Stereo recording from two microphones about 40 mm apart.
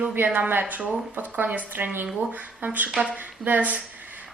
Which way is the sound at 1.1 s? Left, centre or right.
Right.